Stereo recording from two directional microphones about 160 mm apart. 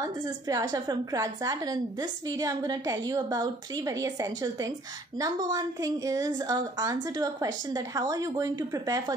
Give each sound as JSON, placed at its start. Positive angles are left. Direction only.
{"t": 0.0, "sound": "a woman's voice", "side_deg": -20}